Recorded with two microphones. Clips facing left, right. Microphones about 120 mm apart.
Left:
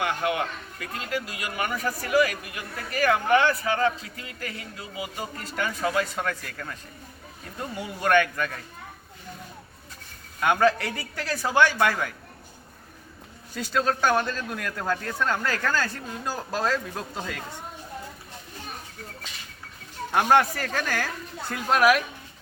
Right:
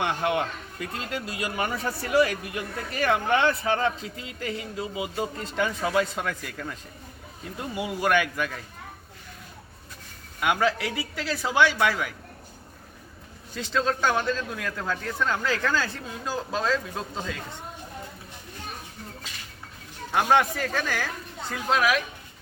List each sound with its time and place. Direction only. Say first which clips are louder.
0.0 s a man's voice: right 1 dB; 25° right (ahead or behind)
7.8 s a man's voice: left 2 dB; 10° right (ahead or behind)
10.4 s a man's voice: left 3 dB; 5° right (ahead or behind)
13.6 s a man's voice: left 1 dB; 5° left (ahead or behind)
20.1 s a man's voice: left 1 dB; 5° left (ahead or behind)